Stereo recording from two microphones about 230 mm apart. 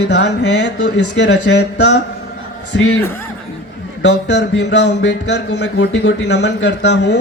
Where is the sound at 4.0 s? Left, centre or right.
Left.